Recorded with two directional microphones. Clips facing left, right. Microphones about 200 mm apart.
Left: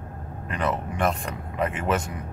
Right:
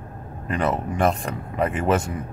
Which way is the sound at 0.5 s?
35° right (ahead or behind).